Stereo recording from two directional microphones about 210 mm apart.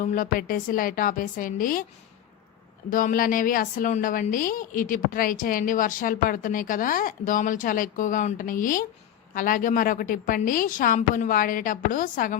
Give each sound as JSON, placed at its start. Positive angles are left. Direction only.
{"t": 0.0, "sound": "a woman's voice", "side_deg": 40}
{"t": 2.9, "sound": "a woman's voice", "side_deg": 40}